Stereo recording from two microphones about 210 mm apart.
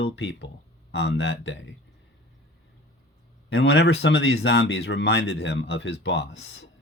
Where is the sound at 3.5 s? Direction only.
55° left (ahead or behind).